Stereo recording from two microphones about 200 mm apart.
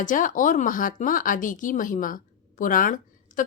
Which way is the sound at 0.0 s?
40° left (ahead or behind).